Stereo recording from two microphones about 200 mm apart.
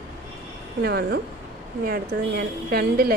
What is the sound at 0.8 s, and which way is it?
A woman's voice, 55° right (ahead or behind).